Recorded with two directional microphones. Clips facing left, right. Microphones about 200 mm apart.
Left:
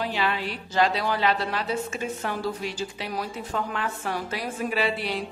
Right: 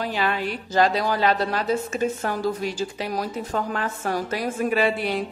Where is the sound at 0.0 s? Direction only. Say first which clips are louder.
Right 2 dB; 45° right (ahead or behind).